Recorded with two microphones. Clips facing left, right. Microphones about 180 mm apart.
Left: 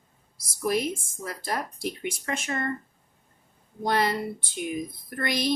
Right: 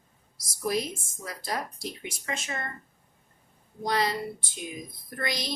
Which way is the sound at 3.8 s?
55° left (ahead or behind).